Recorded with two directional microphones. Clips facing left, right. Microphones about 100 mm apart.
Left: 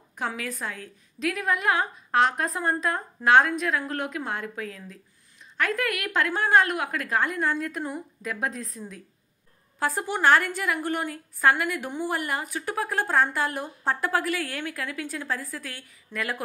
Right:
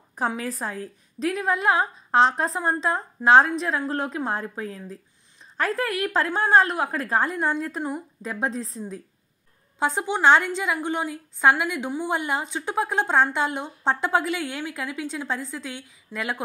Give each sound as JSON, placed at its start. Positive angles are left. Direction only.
{"t": 0.4, "sound": "a woman's voice", "side_deg": -35}